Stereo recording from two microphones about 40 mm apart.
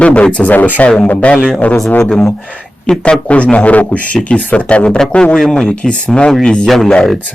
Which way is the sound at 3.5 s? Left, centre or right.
Left.